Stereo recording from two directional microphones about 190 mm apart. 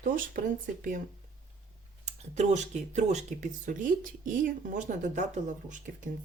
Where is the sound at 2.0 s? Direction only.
35° right (ahead or behind).